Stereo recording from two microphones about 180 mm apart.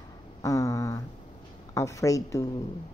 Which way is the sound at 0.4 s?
15° left (ahead or behind).